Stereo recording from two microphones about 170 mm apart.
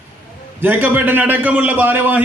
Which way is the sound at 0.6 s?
10° right (ahead or behind).